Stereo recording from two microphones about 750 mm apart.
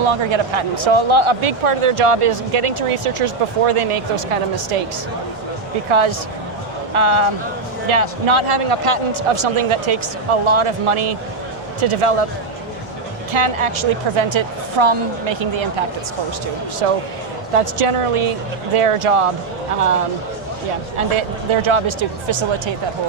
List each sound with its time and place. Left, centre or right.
0.0 s speech: right
5.9 s speech: right
13.3 s speech: right
16.8 s speech: right
21.0 s speech: right